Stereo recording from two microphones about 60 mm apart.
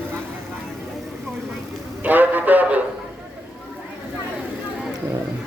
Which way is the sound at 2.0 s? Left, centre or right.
Right.